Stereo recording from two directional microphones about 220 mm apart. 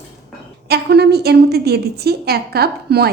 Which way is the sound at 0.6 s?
50° right (ahead or behind).